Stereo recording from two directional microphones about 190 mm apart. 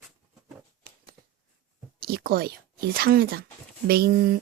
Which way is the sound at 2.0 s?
55° right (ahead or behind).